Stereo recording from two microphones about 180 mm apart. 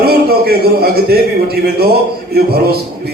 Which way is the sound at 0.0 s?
60° right (ahead or behind).